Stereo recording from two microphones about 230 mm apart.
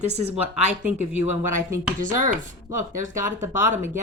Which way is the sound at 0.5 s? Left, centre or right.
Centre.